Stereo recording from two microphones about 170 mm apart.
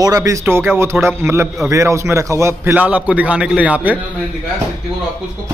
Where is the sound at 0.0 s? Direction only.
20° right (ahead or behind).